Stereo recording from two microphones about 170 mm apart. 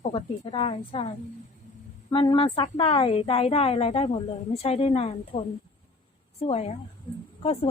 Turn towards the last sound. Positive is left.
turn(degrees=35)  # may be behind; listen again after turning